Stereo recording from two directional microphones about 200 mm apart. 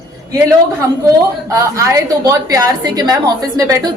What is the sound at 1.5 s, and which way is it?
A woman's voice, 15° right (ahead or behind).